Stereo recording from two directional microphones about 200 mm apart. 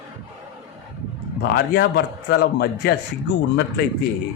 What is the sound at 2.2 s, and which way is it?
Speech, 55° left (ahead or behind).